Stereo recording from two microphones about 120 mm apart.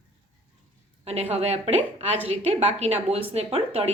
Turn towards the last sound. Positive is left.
turn(degrees=-60)  # may be behind; listen again after turning